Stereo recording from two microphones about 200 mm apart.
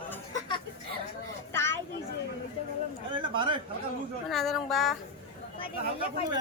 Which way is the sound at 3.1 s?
25° right (ahead or behind).